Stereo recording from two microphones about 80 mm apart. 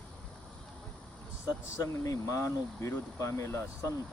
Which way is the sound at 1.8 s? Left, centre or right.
Left.